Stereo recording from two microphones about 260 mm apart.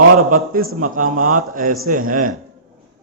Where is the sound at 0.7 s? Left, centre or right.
Right.